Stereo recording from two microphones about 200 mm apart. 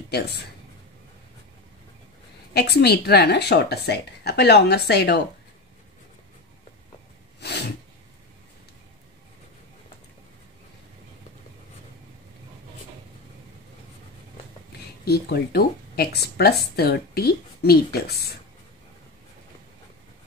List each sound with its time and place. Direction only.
2.5 s speech: 55° left (ahead or behind)
7.3 s snort: 55° left (ahead or behind)
15.0 s speech: 55° left (ahead or behind)